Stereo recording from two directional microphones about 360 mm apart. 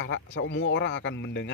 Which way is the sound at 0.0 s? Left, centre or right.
Left.